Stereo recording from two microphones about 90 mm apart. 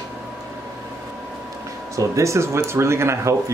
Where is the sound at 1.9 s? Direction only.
35° right (ahead or behind).